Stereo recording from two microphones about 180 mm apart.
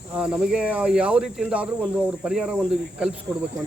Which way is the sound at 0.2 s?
5° right (ahead or behind).